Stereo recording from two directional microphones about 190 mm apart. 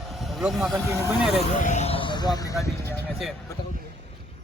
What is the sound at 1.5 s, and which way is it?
Speech, 40° left (ahead or behind).